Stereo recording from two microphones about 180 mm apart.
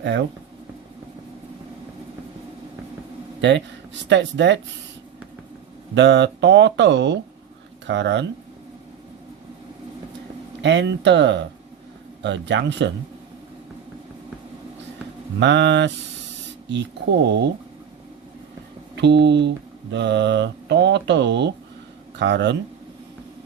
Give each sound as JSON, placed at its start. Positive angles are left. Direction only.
{"t": 0.0, "sound": "speech", "side_deg": -80}
{"t": 3.4, "sound": "speech", "side_deg": -80}
{"t": 5.9, "sound": "mantra", "side_deg": -80}
{"t": 10.6, "sound": "mantra", "side_deg": -75}
{"t": 15.4, "sound": "speech", "side_deg": -80}
{"t": 16.6, "sound": "mantra", "side_deg": -75}
{"t": 18.9, "sound": "mantra", "side_deg": -75}
{"t": 22.2, "sound": "speech", "side_deg": -80}